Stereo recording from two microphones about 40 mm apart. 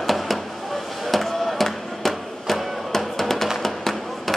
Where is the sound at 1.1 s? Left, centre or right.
Centre.